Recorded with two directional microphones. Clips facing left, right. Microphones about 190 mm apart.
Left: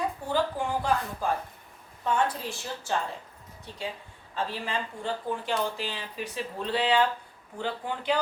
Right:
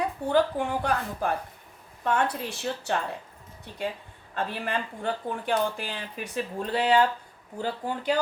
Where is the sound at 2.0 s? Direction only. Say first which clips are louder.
Right 1 dB; 65° right (ahead or behind).